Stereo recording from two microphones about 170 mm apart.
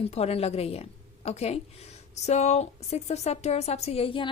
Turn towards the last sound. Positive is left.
turn(degrees=30)  # may be behind; listen again after turning